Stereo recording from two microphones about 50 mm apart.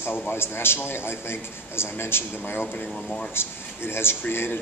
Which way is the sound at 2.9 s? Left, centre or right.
Centre.